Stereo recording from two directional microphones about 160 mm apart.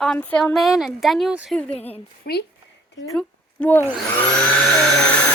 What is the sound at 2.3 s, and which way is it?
Speech, 75° left (ahead or behind).